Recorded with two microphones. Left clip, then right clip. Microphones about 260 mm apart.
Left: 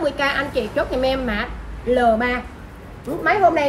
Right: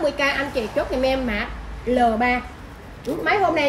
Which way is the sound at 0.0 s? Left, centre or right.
Centre.